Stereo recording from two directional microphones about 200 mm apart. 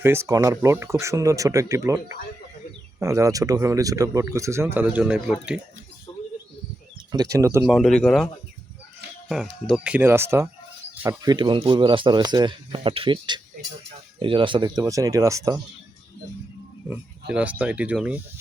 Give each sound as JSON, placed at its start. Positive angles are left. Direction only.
{"t": 0.0, "sound": "speech", "side_deg": -15}
{"t": 7.1, "sound": "speech", "side_deg": -15}
{"t": 7.7, "sound": "speech", "side_deg": 0}
{"t": 9.3, "sound": "speech", "side_deg": 0}
{"t": 16.9, "sound": "speech", "side_deg": -5}